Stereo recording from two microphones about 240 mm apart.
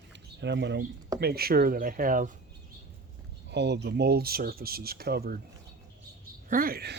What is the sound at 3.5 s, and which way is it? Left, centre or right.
Speech, right.